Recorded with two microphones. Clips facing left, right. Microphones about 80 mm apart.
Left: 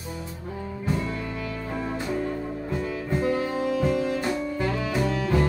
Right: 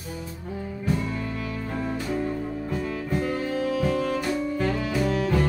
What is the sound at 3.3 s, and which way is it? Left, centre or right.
Music, centre.